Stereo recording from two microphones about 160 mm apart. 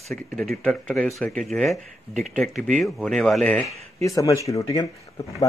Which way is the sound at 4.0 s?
20° left (ahead or behind).